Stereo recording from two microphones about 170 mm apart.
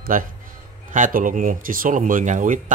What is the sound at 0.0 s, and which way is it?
Speech, 55° right (ahead or behind).